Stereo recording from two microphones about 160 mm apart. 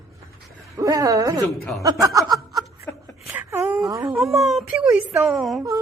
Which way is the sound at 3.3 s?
15° right (ahead or behind).